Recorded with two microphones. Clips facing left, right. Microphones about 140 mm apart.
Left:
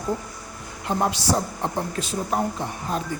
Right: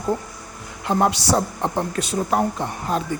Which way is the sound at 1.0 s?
75° right (ahead or behind).